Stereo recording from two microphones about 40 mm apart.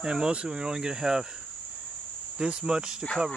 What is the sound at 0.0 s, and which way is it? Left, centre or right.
Speech, centre.